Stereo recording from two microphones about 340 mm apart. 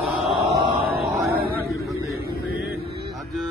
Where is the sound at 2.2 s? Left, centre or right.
Right.